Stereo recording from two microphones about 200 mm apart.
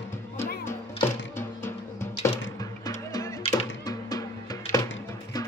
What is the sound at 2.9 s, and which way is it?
Music, 15° left (ahead or behind).